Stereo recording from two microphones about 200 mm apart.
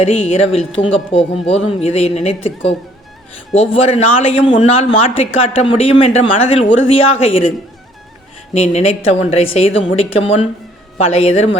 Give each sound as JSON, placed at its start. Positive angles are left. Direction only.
{"t": 0.0, "sound": "speech", "side_deg": 30}
{"t": 3.5, "sound": "a woman's voice", "side_deg": 30}
{"t": 8.5, "sound": "a woman's voice", "side_deg": 35}